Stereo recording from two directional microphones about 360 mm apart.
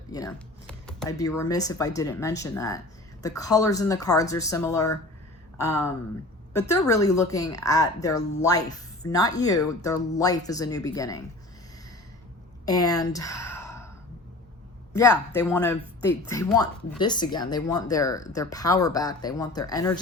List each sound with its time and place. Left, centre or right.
0.1 s a sound: centre
1.1 s speech: centre
12.6 s speech: centre
14.9 s speech: centre